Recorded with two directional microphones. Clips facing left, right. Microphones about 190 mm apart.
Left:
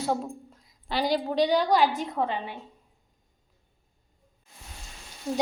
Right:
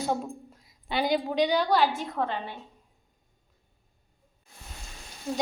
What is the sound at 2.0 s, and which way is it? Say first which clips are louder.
Speech: left 2 dB; 10° left (ahead or behind).